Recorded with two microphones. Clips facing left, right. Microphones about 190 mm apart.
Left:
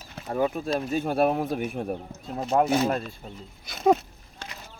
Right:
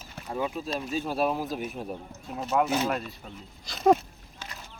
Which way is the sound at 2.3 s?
40° left (ahead or behind).